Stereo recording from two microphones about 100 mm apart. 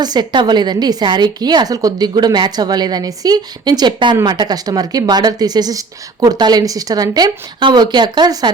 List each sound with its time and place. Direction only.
0.0 s a woman's voice: 45° right (ahead or behind)